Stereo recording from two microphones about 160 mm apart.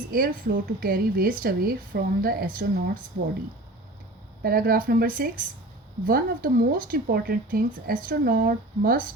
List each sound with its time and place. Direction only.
0.1 s speech: 65° right (ahead or behind)
4.4 s speech: 65° right (ahead or behind)